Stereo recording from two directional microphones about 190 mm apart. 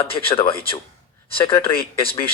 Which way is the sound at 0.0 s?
30° left (ahead or behind).